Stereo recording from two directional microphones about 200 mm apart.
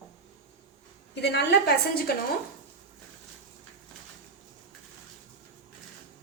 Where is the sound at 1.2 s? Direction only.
55° left (ahead or behind).